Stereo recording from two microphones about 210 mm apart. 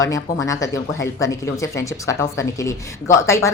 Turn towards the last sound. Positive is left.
turn(degrees=15)  # may be behind; listen again after turning